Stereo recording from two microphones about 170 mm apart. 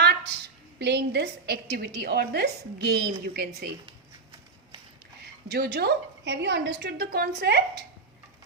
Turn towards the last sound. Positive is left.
turn(degrees=-70)  # may be behind; listen again after turning